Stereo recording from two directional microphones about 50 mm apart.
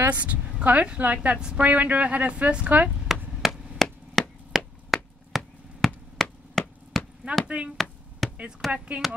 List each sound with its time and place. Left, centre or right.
0.0 s a woman's voice: right
3.1 s chop: centre
7.4 s speech: right
7.7 s a sound: centre
8.7 s a woman's voice: right